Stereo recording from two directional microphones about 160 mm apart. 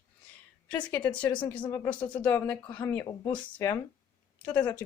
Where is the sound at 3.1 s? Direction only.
20° left (ahead or behind).